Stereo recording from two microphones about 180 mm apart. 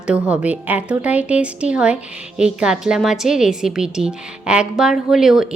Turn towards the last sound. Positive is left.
turn(degrees=-5)  # may be behind; listen again after turning